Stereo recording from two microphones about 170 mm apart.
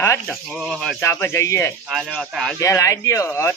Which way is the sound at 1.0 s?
15° left (ahead or behind).